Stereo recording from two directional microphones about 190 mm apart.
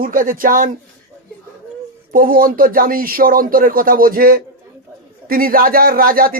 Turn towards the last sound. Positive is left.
turn(degrees=-50)  # may be behind; listen again after turning